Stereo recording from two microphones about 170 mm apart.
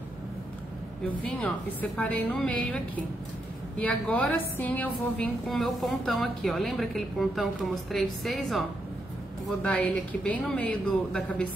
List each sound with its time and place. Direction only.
1.2 s a woman's voice: 10° left (ahead or behind)